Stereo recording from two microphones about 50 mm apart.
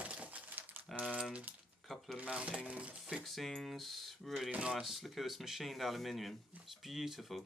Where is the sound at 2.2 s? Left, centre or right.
Right.